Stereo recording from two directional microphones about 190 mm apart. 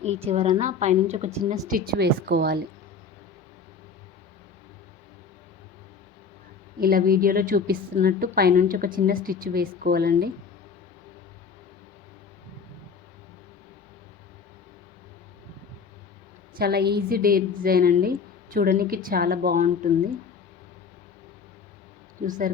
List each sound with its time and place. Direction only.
0.0 s a woman's voice: 35° right (ahead or behind)
1.6 s a woman's voice: 50° right (ahead or behind)
6.7 s a woman's voice: 50° right (ahead or behind)
16.6 s a woman's voice: 55° right (ahead or behind)
22.2 s a woman's voice: 45° right (ahead or behind)